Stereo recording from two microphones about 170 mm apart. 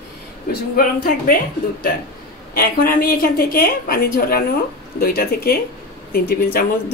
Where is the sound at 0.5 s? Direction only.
60° left (ahead or behind).